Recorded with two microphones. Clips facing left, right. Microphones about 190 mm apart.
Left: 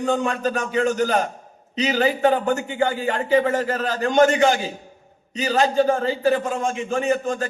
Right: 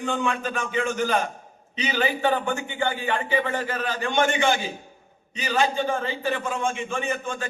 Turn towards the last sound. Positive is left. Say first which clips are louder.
# left 7 dB
turn(degrees=40)  # may be behind; listen again after turning